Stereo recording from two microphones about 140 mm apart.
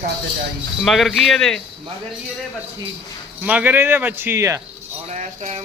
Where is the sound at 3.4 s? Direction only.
10° right (ahead or behind).